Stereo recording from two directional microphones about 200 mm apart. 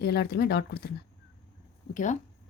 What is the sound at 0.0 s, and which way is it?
Speech, 55° left (ahead or behind).